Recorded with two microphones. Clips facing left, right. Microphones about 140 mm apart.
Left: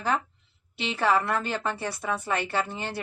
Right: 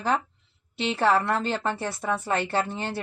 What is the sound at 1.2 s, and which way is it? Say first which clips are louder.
Speech: right 2 dB; 25° right (ahead or behind).